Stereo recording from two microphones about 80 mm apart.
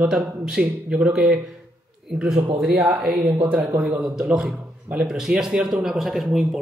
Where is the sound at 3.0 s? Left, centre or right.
Right.